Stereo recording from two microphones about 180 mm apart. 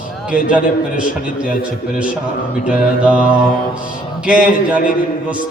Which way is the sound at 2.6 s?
5° right (ahead or behind).